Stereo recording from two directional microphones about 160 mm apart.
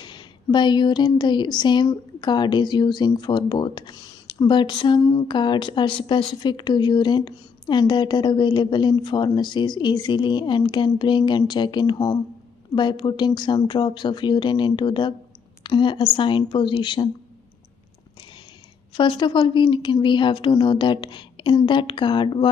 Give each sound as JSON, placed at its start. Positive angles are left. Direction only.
{"t": 0.0, "sound": "a woman's voice", "side_deg": 30}
{"t": 18.9, "sound": "a woman's voice", "side_deg": 30}